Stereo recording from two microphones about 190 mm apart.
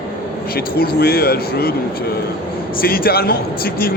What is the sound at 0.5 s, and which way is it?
Speech, 55° left (ahead or behind).